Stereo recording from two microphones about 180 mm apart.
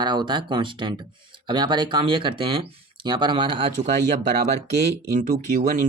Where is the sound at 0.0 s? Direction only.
25° right (ahead or behind).